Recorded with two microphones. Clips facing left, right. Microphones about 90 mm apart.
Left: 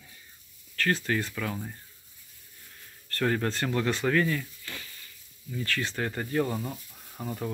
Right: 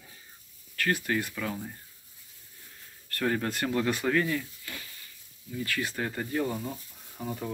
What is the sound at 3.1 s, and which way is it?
Speech, 15° right (ahead or behind).